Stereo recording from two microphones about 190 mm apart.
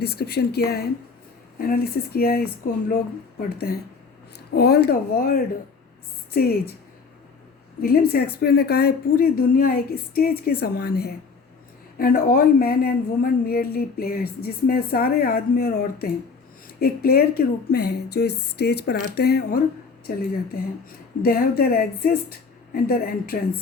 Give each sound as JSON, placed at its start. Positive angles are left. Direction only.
{"t": 0.0, "sound": "a woman's voice", "side_deg": 55}
{"t": 4.5, "sound": "a woman's voice", "side_deg": 55}
{"t": 7.8, "sound": "a woman's voice", "side_deg": 50}